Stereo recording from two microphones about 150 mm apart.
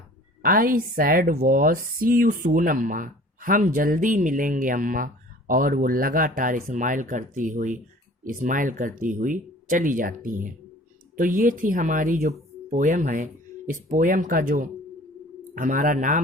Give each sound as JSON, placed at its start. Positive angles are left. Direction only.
{"t": 0.4, "sound": "speech", "side_deg": -70}